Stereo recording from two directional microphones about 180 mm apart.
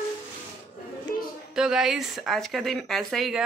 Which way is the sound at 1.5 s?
5° right (ahead or behind).